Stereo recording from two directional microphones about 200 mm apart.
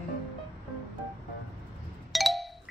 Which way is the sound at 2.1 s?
Centre (ahead or behind).